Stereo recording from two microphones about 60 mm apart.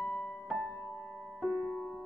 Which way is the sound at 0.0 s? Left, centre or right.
Centre.